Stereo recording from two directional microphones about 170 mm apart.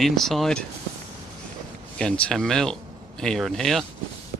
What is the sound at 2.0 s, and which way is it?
Speech, 5° left (ahead or behind).